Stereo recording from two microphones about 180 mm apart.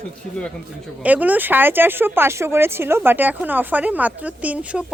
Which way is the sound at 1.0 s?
10° right (ahead or behind).